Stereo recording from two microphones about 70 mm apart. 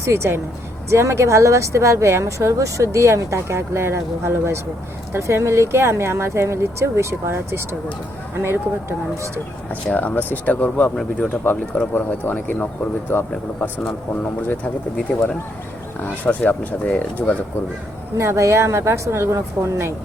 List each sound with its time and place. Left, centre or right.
0.0 s a woman's voice: right
9.9 s speech: left
11.9 s speech: left
16.2 s speech: left
18.2 s speech: right